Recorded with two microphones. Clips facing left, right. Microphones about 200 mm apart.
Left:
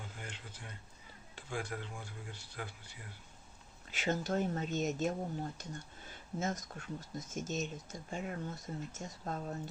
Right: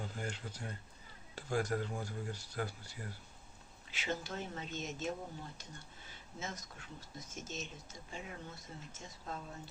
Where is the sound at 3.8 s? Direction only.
45° left (ahead or behind).